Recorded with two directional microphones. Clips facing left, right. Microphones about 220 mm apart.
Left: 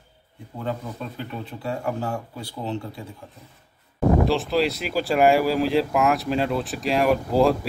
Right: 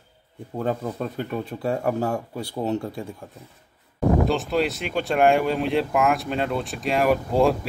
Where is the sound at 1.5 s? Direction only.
40° right (ahead or behind).